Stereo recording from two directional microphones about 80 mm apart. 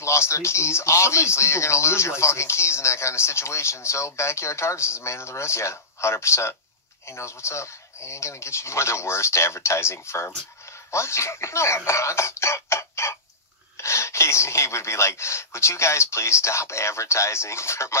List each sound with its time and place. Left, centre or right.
0.0 s speech: left